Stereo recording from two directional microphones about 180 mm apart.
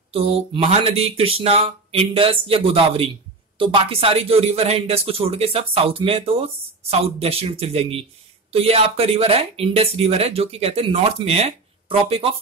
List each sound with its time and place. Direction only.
0.1 s speech: 30° right (ahead or behind)